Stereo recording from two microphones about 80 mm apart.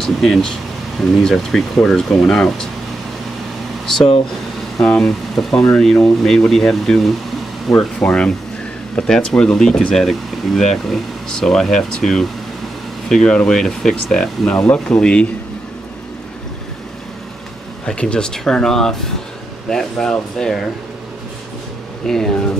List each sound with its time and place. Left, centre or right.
0.0 s speech: centre
3.8 s speech: centre
17.8 s speech: centre
22.0 s speech: centre